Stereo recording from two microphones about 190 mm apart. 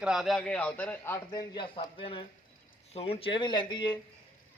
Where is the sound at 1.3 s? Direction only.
25° left (ahead or behind).